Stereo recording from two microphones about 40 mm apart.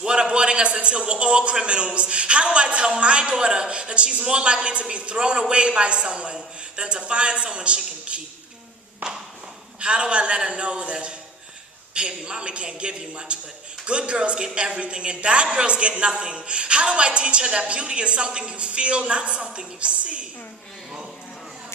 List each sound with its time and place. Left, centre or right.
0.0 s a man's voice: right
9.0 s a sound: right
9.8 s a man's voice: right